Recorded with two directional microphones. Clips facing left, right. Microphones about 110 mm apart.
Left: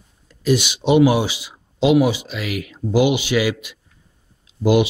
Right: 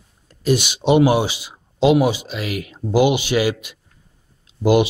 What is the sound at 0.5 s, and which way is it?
Speech, 45° right (ahead or behind).